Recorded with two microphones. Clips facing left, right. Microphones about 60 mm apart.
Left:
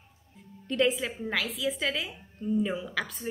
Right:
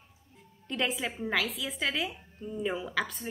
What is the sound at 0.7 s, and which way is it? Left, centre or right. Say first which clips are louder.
A woman's voice: left 5 dB; centre.